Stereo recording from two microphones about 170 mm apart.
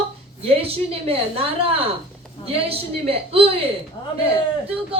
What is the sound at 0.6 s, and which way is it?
A woman's voice, 35° right (ahead or behind).